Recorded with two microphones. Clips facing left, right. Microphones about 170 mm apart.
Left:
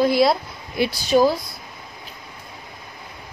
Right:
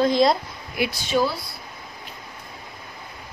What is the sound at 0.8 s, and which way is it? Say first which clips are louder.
Speech: left 5 dB; 35° left (ahead or behind).